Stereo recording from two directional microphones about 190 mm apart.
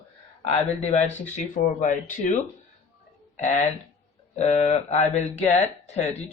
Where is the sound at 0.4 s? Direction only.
35° left (ahead or behind).